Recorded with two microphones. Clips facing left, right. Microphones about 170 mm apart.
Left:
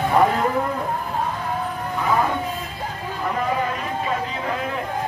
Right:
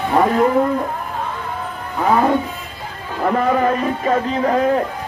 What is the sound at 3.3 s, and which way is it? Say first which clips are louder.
A man's voice: right 8 dB; 50° right (ahead or behind).